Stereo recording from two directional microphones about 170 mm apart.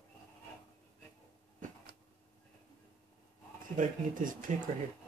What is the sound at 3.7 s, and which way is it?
Speech, 50° right (ahead or behind).